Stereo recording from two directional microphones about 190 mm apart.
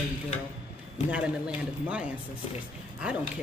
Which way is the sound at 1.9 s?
5° right (ahead or behind).